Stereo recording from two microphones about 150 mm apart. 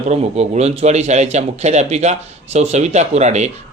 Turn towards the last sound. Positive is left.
turn(degrees=-50)  # may be behind; listen again after turning